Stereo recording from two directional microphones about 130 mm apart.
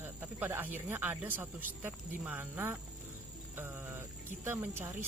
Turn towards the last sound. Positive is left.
turn(degrees=-20)  # may be behind; listen again after turning